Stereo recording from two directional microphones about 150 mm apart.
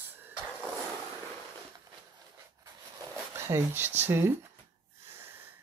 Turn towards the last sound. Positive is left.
turn(degrees=-15)  # may be behind; listen again after turning